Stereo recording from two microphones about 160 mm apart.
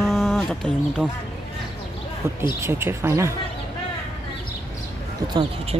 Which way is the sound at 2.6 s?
15° right (ahead or behind).